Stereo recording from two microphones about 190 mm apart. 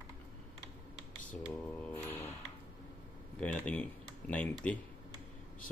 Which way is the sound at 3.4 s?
5° left (ahead or behind).